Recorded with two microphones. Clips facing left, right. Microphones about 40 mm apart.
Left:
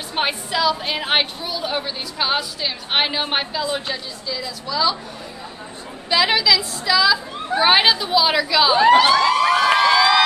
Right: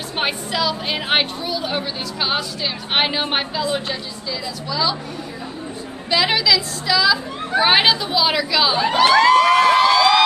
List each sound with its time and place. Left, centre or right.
0.1 s a woman's voice: centre
6.0 s a woman's voice: centre
9.2 s crowd: right
9.8 s a sound: centre